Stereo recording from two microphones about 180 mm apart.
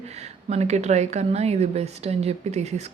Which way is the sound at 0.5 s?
40° right (ahead or behind).